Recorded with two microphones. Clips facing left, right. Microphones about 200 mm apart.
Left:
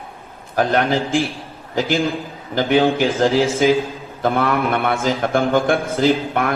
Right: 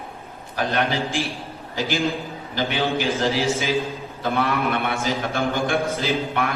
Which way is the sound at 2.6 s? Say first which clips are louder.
Left 8 dB; 50° left (ahead or behind).